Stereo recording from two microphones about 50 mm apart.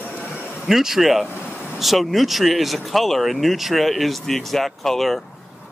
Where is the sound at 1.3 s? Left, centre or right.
Left.